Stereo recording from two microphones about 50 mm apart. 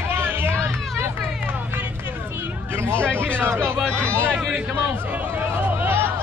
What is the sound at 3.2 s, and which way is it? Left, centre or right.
Music, right.